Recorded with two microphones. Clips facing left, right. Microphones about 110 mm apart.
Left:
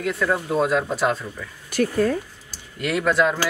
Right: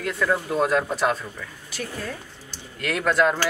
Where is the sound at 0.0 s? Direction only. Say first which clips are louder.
Left 1 dB; centre (ahead or behind).